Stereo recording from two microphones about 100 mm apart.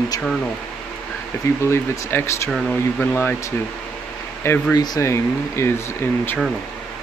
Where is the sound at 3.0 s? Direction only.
15° left (ahead or behind).